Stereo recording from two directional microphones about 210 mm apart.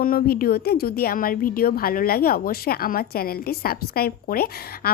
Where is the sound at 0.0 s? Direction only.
45° left (ahead or behind).